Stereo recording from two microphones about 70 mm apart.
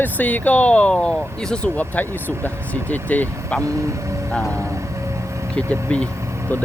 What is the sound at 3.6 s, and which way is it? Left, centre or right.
Speech, right.